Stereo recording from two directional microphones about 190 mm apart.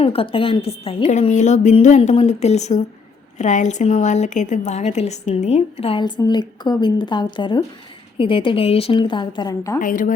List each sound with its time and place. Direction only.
0.0 s a woman's voice: 30° left (ahead or behind)
9.8 s a woman's voice: 45° left (ahead or behind)